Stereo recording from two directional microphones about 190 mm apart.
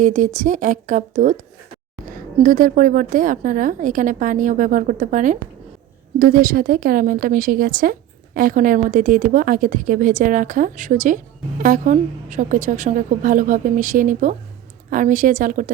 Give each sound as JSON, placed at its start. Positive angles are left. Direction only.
{"t": 0.0, "sound": "a woman's voice", "side_deg": -40}